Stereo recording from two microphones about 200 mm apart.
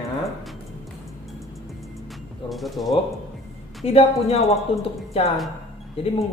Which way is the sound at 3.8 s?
30° left (ahead or behind).